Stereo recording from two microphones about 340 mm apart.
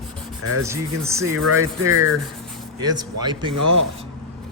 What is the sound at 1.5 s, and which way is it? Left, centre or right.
Rub, right.